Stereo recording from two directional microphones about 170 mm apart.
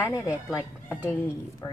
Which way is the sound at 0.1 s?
5° right (ahead or behind).